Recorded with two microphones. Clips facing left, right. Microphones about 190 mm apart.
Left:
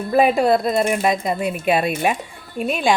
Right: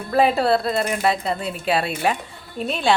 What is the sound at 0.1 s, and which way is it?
A woman's voice, 15° left (ahead or behind).